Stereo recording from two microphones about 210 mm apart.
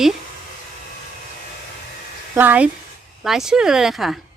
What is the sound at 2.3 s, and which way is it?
A woman's voice, 10° right (ahead or behind).